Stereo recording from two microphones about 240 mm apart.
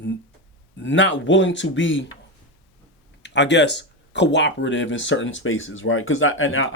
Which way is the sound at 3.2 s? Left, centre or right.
Left.